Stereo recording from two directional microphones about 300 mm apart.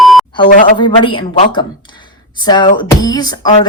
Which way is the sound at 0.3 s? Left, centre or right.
Centre.